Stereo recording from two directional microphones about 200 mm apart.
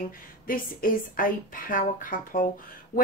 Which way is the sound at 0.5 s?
45° left (ahead or behind).